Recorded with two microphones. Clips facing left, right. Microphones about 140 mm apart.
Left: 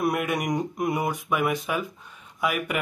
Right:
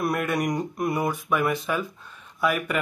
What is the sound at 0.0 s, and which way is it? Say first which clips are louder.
Speech: even; 15° left (ahead or behind).